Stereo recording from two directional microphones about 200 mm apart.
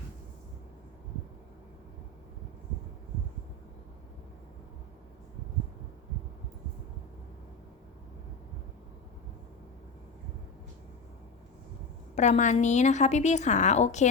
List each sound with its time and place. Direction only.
12.1 s a woman's voice: 35° left (ahead or behind)